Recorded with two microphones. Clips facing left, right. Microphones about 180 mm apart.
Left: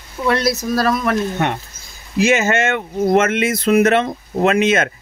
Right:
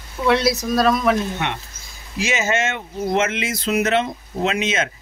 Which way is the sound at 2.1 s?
55° left (ahead or behind).